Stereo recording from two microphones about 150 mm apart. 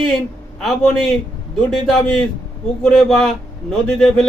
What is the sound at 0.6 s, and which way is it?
Speech, centre (ahead or behind).